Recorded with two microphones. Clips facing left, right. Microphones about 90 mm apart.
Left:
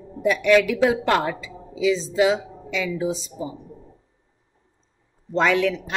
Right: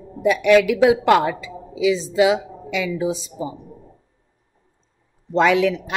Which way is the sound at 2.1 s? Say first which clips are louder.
Right 3 dB; 80° right.